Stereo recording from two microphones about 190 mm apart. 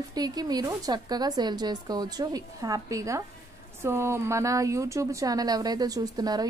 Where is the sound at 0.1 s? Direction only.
20° right (ahead or behind).